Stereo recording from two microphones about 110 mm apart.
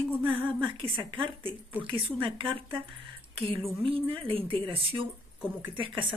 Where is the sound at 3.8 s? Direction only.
55° right (ahead or behind).